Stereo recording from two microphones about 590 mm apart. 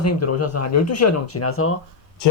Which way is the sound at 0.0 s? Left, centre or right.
Left.